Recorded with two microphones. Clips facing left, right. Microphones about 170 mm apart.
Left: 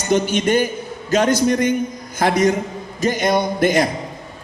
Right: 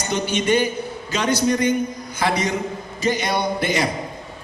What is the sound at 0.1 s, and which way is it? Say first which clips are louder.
A woman's voice: left 4 dB; 45° left (ahead or behind).